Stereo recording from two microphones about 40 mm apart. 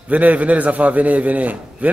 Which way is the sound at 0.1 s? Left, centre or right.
Right.